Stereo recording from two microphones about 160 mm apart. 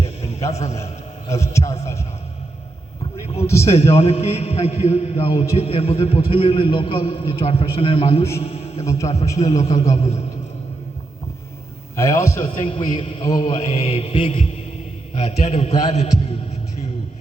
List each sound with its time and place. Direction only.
0.5 s a man's voice: 40° left (ahead or behind)
1.3 s a man's voice: 20° left (ahead or behind)
3.6 s a man's voice: 40° left (ahead or behind)
8.4 s a sound: 40° left (ahead or behind)
8.9 s a man's voice: 20° left (ahead or behind)
11.9 s a man's voice: 20° left (ahead or behind)
12.5 s a man's voice: 30° left (ahead or behind)
13.7 s a man's voice: 40° left (ahead or behind)
15.9 s a sound: 40° left (ahead or behind)